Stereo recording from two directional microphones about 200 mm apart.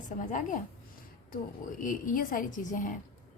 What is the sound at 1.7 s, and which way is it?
Speech, 40° left (ahead or behind).